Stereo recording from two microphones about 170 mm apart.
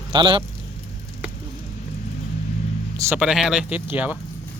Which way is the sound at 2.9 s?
15° right (ahead or behind).